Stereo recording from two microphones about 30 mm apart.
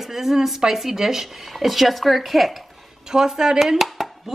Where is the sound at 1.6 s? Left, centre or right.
Centre.